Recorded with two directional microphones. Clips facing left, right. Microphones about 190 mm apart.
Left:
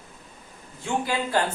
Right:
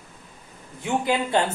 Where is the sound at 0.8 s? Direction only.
20° right (ahead or behind).